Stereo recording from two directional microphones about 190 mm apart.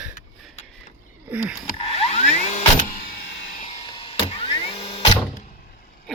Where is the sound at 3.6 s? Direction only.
25° left (ahead or behind).